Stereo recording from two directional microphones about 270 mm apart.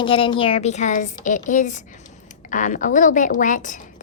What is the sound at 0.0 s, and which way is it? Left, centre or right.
A woman's voice, centre.